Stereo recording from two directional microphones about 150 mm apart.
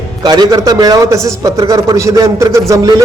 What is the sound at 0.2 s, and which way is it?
A man's voice, 25° right (ahead or behind).